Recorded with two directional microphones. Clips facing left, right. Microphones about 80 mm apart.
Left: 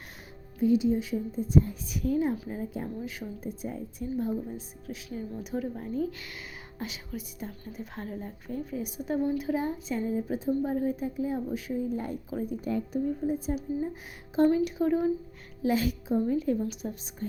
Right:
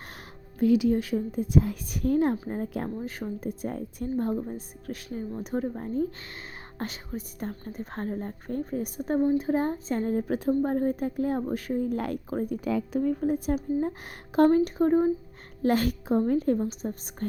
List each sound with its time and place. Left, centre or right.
0.6 s a woman's voice: right
1.9 s speech: right
2.3 s speech: right
2.6 s speech: right
9.6 s a woman's voice: right
12.3 s speech: right
12.6 s speech: right
14.5 s speech: right
15.6 s speech: right